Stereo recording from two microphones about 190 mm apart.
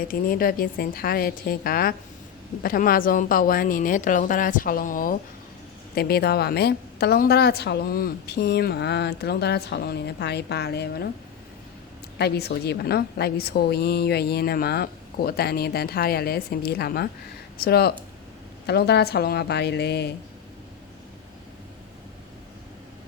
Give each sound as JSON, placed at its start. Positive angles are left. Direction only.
{"t": 0.1, "sound": "a woman's voice", "side_deg": 50}
{"t": 12.1, "sound": "a woman's voice", "side_deg": 60}